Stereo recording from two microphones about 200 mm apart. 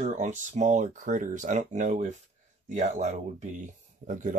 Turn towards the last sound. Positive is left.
turn(degrees=-40)  # may be behind; listen again after turning